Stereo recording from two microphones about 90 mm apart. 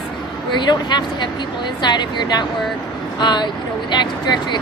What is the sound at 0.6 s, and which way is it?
Speech, 55° left (ahead or behind).